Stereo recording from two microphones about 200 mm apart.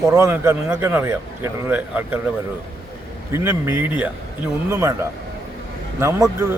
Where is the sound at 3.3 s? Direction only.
10° right (ahead or behind).